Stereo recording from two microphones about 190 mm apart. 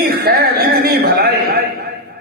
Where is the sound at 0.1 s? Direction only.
55° right (ahead or behind).